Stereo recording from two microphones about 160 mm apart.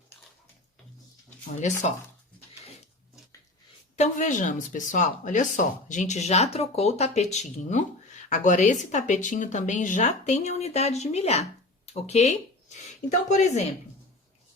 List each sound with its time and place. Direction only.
1.6 s speech: 50° left (ahead or behind)
3.9 s speech: 50° left (ahead or behind)